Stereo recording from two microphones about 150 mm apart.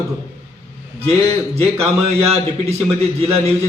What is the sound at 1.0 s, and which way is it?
A man's voice, 45° right (ahead or behind).